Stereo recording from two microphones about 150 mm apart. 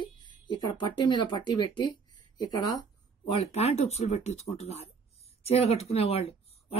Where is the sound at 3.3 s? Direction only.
40° left (ahead or behind).